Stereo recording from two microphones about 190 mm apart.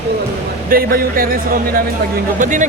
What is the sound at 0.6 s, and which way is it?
A man's voice, 50° right (ahead or behind).